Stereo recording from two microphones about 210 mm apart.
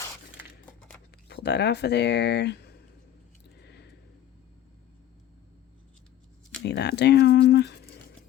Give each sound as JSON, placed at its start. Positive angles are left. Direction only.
{"t": 1.3, "sound": "speech", "side_deg": 55}
{"t": 3.6, "sound": "a sound", "side_deg": 55}
{"t": 6.7, "sound": "speech", "side_deg": 55}